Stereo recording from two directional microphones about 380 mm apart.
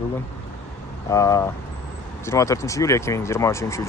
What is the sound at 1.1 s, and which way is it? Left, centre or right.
Speech, centre.